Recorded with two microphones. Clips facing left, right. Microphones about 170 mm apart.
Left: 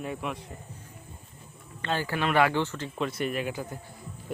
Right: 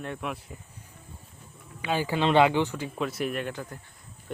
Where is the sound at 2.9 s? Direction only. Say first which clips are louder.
Left 3 dB; centre (ahead or behind).